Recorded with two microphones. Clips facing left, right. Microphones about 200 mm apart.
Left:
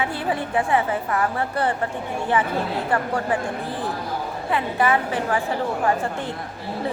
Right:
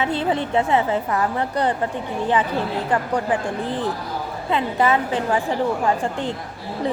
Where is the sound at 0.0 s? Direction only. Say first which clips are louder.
Right 3 dB; 20° right (ahead or behind).